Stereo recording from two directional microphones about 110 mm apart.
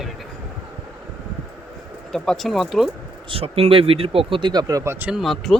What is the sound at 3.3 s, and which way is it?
Speech, 65° right (ahead or behind).